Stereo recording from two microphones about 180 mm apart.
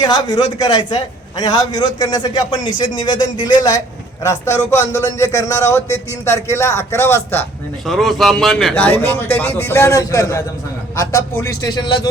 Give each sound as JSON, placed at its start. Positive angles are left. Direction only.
{"t": 0.0, "sound": "a man's voice", "side_deg": 20}
{"t": 7.9, "sound": "a man's voice", "side_deg": 0}